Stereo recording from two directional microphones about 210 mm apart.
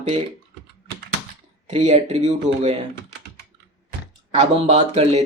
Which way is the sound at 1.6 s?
35° right (ahead or behind).